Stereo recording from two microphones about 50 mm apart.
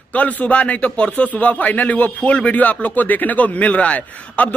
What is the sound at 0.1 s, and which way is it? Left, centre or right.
A man's voice, left.